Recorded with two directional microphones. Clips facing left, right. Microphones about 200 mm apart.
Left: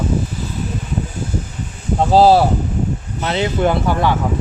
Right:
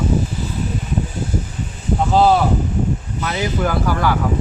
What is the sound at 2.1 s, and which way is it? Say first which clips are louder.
Speech: left 4 dB; 35° left (ahead or behind).